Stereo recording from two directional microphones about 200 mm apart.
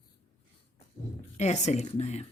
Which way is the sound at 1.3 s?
35° left (ahead or behind).